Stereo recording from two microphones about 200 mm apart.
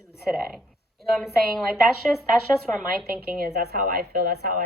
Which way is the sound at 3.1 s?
45° right (ahead or behind).